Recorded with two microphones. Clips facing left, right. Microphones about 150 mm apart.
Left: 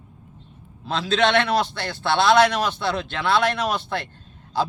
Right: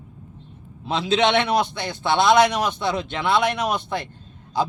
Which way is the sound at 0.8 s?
20° right (ahead or behind).